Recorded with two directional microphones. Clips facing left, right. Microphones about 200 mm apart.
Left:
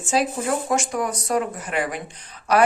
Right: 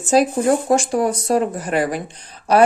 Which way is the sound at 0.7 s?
30° right (ahead or behind).